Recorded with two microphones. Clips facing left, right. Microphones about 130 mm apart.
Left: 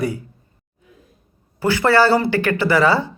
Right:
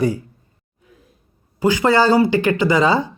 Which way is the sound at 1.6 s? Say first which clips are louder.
Even; 15° right (ahead or behind).